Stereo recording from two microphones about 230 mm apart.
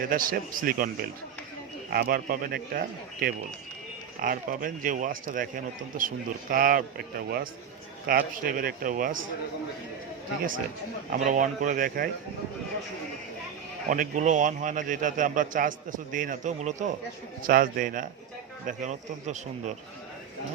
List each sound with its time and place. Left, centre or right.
0.0 s a man's voice: right
1.9 s a man's voice: right
11.3 s a man's voice: right
13.9 s a man's voice: right